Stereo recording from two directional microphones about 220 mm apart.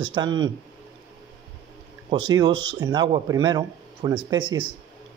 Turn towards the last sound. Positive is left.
turn(degrees=-20)  # may be behind; listen again after turning